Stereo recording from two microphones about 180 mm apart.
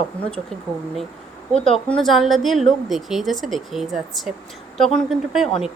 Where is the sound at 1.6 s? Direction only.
Centre (ahead or behind).